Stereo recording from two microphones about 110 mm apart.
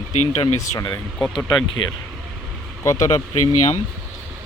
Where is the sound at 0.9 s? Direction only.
10° left (ahead or behind).